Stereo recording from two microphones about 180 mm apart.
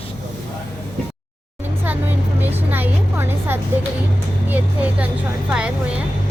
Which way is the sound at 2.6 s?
10° right (ahead or behind).